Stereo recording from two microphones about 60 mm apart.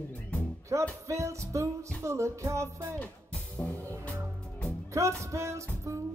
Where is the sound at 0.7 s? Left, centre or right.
Right.